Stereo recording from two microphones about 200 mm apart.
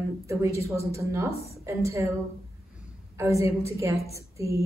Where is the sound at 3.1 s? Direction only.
15° right (ahead or behind).